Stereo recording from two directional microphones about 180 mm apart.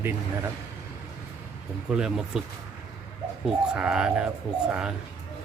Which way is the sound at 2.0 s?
5° right (ahead or behind).